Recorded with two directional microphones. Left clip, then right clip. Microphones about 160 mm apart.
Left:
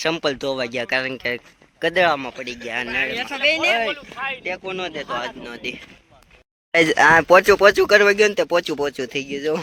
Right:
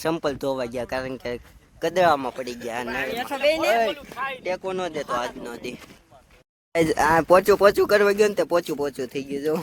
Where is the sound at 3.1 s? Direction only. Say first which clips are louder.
Even; 60° right (ahead or behind).